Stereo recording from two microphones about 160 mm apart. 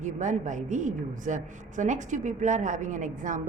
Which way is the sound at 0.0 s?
50° right (ahead or behind).